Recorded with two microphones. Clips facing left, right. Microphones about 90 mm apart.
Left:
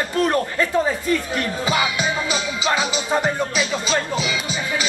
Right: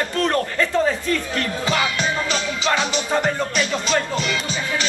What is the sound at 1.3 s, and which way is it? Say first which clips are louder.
Music: left 1 dB; 10° left (ahead or behind).